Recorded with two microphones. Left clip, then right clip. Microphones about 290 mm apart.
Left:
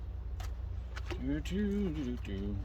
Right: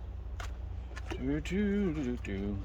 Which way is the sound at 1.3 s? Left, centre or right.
Centre.